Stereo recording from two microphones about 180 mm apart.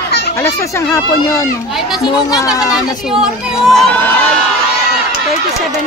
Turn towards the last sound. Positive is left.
turn(degrees=0)  # may be behind; listen again after turning